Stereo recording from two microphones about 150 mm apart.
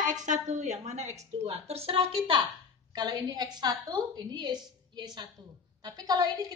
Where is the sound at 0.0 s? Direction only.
55° right (ahead or behind).